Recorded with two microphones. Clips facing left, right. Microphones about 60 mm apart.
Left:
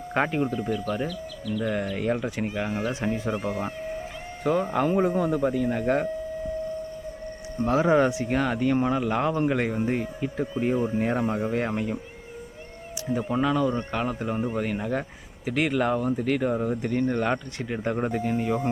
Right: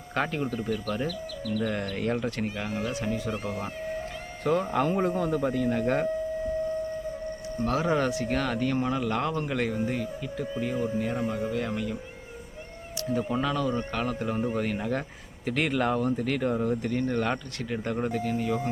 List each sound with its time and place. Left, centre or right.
0.1 s speech: centre
1.6 s speech: centre
2.8 s speech: left
3.3 s speech: centre
7.6 s speech: centre
13.1 s speech: centre